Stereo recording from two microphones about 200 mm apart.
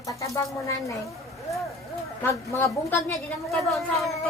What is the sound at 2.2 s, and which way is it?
A woman's voice, 10° left (ahead or behind).